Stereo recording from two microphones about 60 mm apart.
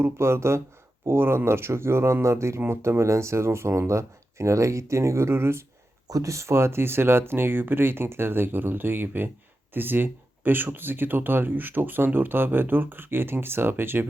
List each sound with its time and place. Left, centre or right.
0.0 s speech: right
6.1 s speech: right